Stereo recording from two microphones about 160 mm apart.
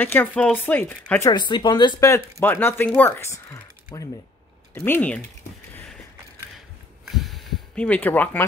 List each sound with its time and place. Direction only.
0.0 s speech: 10° left (ahead or behind)
1.3 s speech: 30° left (ahead or behind); by 5.2 s 10° left (ahead or behind)
7.1 s a sound: centre (ahead or behind)